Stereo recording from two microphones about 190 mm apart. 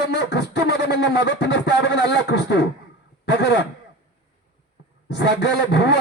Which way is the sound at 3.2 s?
60° left (ahead or behind).